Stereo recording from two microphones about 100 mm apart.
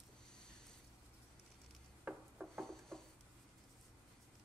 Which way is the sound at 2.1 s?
15° right (ahead or behind).